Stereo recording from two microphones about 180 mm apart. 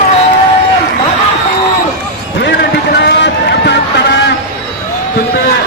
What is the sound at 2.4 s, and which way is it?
Run, 70° left (ahead or behind).